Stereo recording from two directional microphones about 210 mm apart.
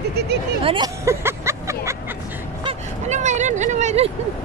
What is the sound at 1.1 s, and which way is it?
Vehicle, 10° right (ahead or behind).